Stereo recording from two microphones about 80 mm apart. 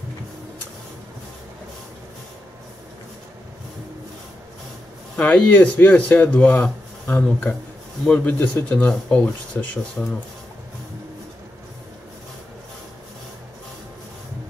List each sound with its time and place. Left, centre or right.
5.2 s speech: centre